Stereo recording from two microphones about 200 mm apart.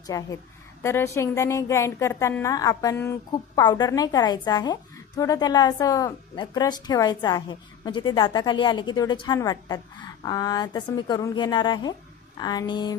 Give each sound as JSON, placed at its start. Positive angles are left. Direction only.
{"t": 0.1, "sound": "a woman's voice", "side_deg": 15}